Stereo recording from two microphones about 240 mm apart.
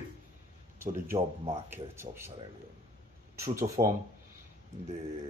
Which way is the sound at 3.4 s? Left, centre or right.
Centre.